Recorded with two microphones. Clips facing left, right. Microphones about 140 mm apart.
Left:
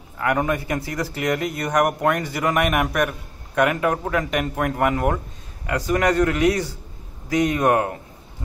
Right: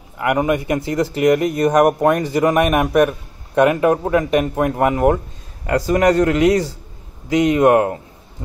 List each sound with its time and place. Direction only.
0.2 s a man's voice: 15° right (ahead or behind)
5.7 s a man's voice: 30° right (ahead or behind)